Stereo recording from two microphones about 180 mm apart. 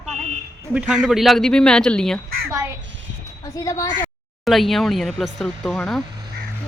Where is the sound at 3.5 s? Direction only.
20° left (ahead or behind).